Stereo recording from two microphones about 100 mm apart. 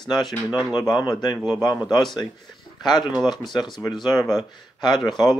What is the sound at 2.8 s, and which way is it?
Speech, 45° left (ahead or behind).